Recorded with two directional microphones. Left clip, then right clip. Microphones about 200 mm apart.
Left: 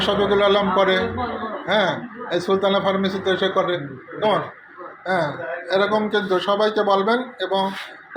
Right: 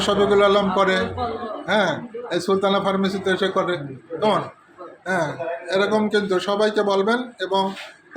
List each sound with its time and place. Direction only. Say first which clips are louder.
0.0 s speech: right 1 dB; 25° right (ahead or behind)